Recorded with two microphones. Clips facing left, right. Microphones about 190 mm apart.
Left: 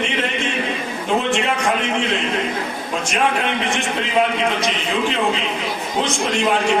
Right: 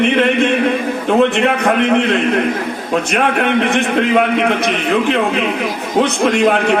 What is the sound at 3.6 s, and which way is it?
A man's voice, 60° right (ahead or behind).